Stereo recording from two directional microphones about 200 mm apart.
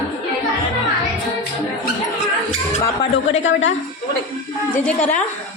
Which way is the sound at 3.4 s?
70° left (ahead or behind).